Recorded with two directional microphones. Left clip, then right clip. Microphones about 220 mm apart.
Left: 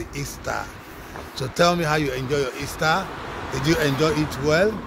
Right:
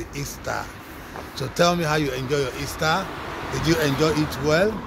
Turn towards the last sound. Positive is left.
turn(degrees=15)  # may be behind; listen again after turning